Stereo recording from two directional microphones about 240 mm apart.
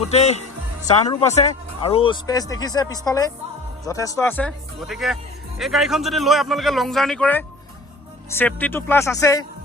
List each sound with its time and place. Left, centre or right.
0.1 s a man's voice: left